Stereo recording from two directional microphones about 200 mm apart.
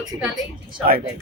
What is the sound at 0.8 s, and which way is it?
Speech, 45° right (ahead or behind).